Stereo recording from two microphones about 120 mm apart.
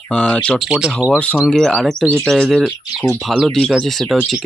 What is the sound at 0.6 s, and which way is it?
Speech, 5° right (ahead or behind).